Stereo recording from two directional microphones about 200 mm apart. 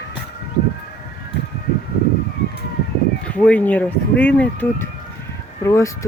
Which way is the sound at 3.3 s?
5° left (ahead or behind).